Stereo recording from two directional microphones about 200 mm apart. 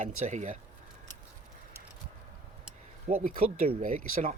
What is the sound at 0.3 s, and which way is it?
Speech, 35° right (ahead or behind).